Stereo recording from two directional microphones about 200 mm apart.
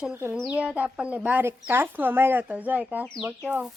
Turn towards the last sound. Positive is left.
turn(degrees=-5)  # may be behind; listen again after turning